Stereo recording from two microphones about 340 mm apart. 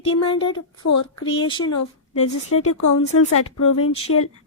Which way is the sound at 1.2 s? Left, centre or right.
Centre.